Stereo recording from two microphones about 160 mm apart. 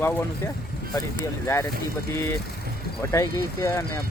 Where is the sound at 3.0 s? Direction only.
15° left (ahead or behind).